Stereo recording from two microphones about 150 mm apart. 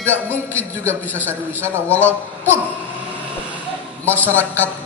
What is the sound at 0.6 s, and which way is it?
Speech, 10° left (ahead or behind).